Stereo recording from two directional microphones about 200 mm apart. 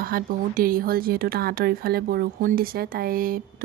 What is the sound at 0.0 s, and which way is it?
Speech, 45° right (ahead or behind).